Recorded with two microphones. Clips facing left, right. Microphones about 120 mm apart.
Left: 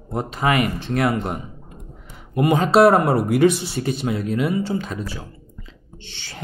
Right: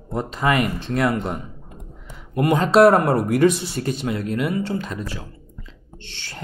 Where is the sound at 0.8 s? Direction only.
10° left (ahead or behind).